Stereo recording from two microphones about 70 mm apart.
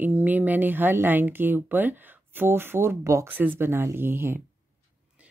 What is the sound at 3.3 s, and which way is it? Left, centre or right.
Speech, right.